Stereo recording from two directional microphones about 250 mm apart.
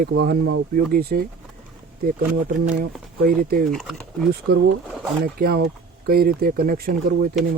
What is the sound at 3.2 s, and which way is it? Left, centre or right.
Speech, right.